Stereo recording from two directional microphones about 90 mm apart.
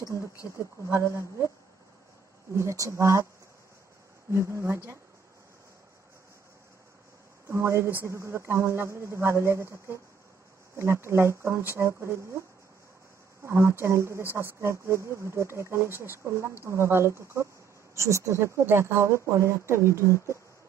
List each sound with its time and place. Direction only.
0.0 s speech: 35° left (ahead or behind)
0.8 s speech: 30° right (ahead or behind)
2.5 s speech: 35° right (ahead or behind)
4.3 s speech: 30° right (ahead or behind)
7.4 s speech: 30° right (ahead or behind)